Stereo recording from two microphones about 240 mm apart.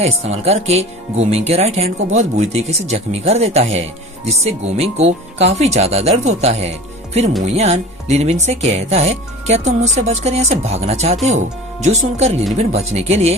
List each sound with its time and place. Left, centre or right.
0.0 s speech: right